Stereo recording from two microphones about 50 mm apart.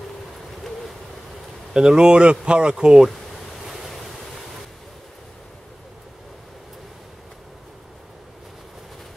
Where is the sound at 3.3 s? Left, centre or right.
Centre.